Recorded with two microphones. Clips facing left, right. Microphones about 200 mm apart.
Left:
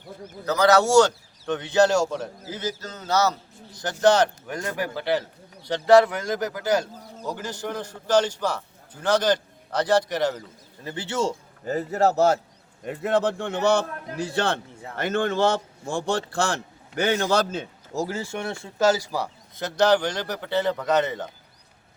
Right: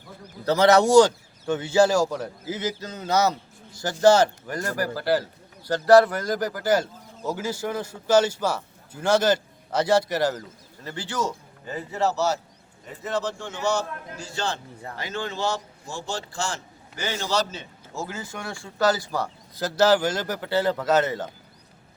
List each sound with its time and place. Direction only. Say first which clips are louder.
0.4 s a man's voice: right 1 dB; 25° right (ahead or behind); by 10.3 s 5° right (ahead or behind)
10.8 s speech: left 3 dB; 20° left (ahead or behind)
11.6 s speech: left 4 dB; 40° left (ahead or behind)
12.8 s a man's voice: left 6 dB; 65° left (ahead or behind); by 18.0 s 45° left (ahead or behind)
18.0 s speech: left 5 dB; 30° left (ahead or behind)
19.1 s a man's voice: even; centre (ahead or behind)